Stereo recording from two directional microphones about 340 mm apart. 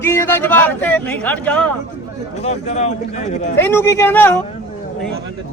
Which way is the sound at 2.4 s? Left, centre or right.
Centre.